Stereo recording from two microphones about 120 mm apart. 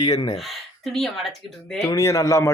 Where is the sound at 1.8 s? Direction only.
25° left (ahead or behind).